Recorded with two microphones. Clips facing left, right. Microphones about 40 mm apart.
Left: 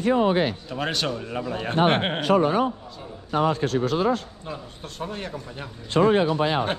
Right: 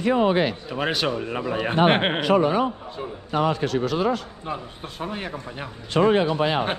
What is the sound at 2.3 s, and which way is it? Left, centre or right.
A man's voice, right.